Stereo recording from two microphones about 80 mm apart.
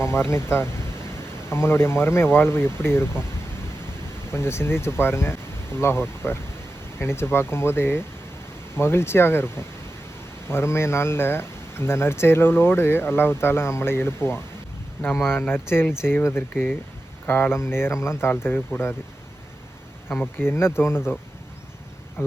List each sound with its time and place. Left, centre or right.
0.0 s speech: left
4.3 s speech: left
20.4 s speech: left